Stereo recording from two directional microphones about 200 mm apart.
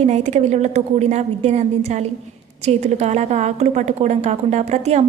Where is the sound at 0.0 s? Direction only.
35° right (ahead or behind).